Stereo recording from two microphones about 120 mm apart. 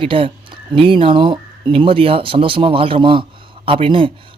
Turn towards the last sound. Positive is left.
turn(degrees=-45)  # may be behind; listen again after turning